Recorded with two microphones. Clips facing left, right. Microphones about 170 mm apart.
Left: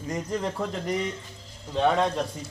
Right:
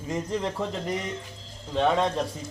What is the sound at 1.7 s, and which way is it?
Speech, centre (ahead or behind).